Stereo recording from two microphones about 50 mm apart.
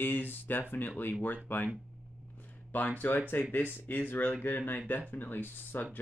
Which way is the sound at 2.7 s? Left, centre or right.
Left.